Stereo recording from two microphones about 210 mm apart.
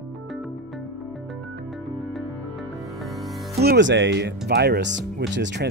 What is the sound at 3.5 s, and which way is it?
Speech, 50° right (ahead or behind).